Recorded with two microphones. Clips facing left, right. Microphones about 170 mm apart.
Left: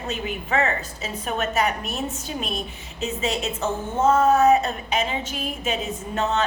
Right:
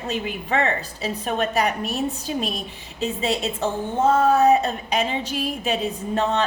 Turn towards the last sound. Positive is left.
turn(degrees=-35)  # may be behind; listen again after turning